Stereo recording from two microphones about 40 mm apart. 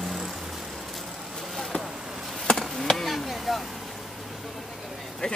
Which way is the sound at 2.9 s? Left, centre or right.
Centre.